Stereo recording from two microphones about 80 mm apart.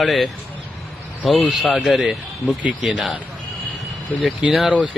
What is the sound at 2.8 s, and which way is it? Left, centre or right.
Speech, centre.